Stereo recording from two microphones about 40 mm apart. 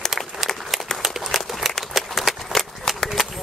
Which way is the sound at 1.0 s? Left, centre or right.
Centre.